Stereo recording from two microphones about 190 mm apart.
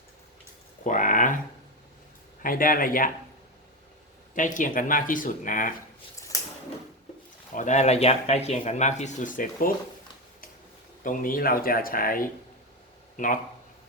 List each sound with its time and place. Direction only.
0.9 s a sound: 45° left (ahead or behind)
2.4 s speech: 45° left (ahead or behind)
4.4 s speech: 40° left (ahead or behind)
7.5 s speech: 40° left (ahead or behind)
11.0 s speech: 45° left (ahead or behind)